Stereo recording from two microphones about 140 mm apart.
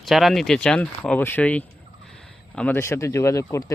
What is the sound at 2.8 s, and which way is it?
Speech, 20° left (ahead or behind).